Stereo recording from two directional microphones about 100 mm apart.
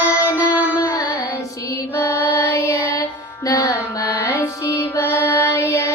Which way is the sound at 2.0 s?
20° left (ahead or behind).